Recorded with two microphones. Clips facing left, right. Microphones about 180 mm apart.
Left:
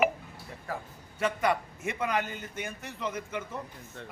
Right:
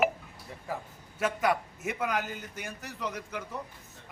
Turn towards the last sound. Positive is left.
turn(degrees=0)  # may be behind; listen again after turning